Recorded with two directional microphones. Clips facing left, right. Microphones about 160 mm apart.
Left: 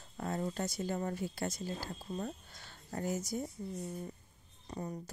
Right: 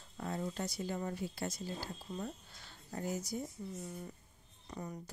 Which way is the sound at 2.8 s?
50° left (ahead or behind).